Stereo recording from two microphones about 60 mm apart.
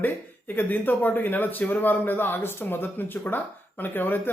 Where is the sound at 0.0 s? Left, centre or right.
Left.